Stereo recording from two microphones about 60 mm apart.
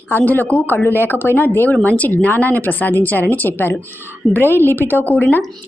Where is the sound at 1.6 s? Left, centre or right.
Left.